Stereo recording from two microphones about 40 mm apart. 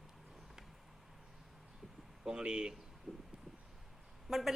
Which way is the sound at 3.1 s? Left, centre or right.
Centre.